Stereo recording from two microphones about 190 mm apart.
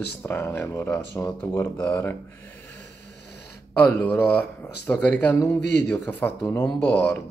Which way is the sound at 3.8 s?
10° left (ahead or behind).